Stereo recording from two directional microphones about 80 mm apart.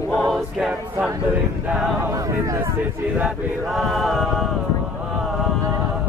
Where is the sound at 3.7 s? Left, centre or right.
Centre.